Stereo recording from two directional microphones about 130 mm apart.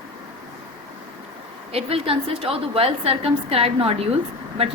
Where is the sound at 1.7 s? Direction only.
45° right (ahead or behind).